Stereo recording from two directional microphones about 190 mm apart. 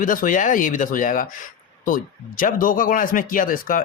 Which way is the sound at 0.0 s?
45° left (ahead or behind).